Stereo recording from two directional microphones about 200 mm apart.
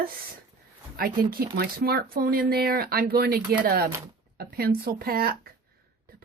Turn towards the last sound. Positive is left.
turn(degrees=-50)  # may be behind; listen again after turning